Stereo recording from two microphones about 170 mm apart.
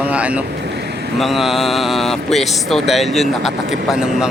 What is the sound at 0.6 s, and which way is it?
Vehicle, 75° right (ahead or behind).